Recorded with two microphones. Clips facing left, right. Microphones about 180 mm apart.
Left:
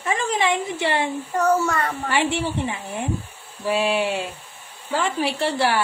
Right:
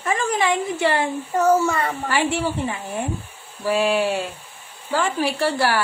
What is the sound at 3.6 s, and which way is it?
Laughter, 20° left (ahead or behind).